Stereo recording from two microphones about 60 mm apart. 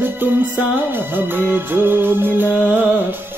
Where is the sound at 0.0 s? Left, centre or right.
Right.